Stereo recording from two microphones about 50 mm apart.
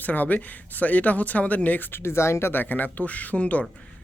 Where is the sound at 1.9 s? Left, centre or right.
Left.